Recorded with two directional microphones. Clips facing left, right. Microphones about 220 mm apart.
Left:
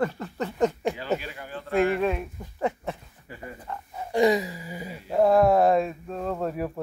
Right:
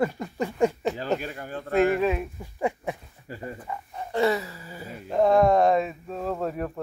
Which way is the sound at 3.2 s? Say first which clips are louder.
Right 4 dB; 35° right (ahead or behind).